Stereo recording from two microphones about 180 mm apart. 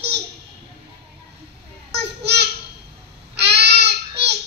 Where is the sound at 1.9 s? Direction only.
65° right (ahead or behind).